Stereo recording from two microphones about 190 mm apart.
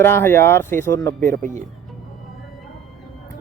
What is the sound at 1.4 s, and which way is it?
Speech, 45° right (ahead or behind).